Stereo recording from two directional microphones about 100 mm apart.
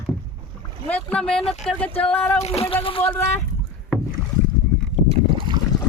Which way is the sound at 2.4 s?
85° left.